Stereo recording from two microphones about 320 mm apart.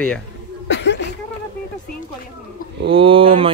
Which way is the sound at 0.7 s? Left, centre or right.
Left.